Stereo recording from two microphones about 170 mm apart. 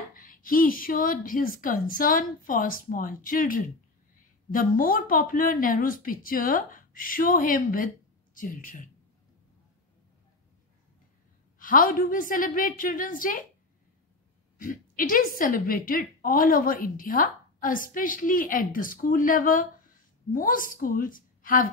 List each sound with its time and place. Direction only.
0.1 s a woman's voice: 55° left (ahead or behind)
11.5 s a woman's voice: 55° left (ahead or behind)
14.6 s a woman's voice: 55° left (ahead or behind)